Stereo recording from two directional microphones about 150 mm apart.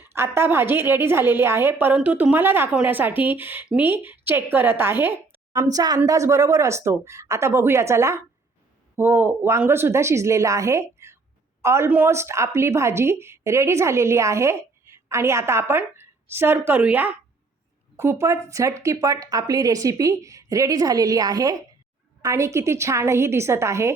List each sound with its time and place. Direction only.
0.0 s a woman's voice: 15° right (ahead or behind)
5.5 s a woman's voice: 25° right (ahead or behind)